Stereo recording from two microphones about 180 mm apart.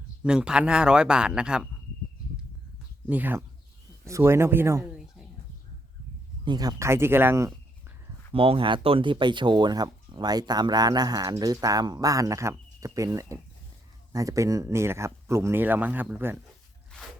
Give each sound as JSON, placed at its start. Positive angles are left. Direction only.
{"t": 0.2, "sound": "speech", "side_deg": -5}
{"t": 3.1, "sound": "speech", "side_deg": -10}
{"t": 6.4, "sound": "speech", "side_deg": -25}
{"t": 8.3, "sound": "speech", "side_deg": -30}